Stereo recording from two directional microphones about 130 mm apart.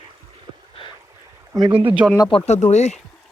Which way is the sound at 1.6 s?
40° right (ahead or behind).